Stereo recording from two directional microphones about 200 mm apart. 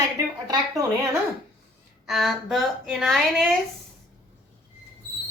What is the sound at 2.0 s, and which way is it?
Speech, centre (ahead or behind).